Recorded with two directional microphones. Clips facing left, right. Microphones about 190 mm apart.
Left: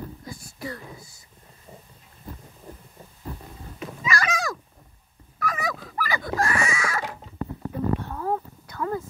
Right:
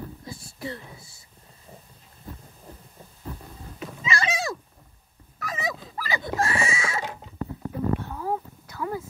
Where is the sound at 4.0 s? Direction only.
25° right (ahead or behind).